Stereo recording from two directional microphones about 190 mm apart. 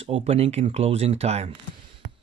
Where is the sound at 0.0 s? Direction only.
30° right (ahead or behind).